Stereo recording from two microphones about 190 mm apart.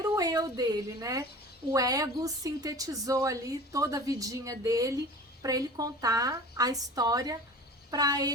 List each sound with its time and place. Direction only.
0.0 s a woman's voice: 20° right (ahead or behind)